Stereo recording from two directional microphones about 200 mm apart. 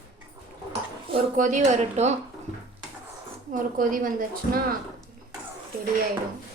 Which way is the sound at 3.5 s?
40° right (ahead or behind).